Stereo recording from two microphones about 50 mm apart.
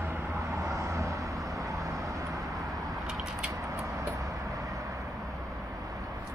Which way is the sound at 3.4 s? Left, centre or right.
Right.